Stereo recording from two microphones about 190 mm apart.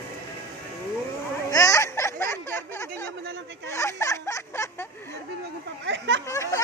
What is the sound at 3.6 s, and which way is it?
Speech, 15° left (ahead or behind).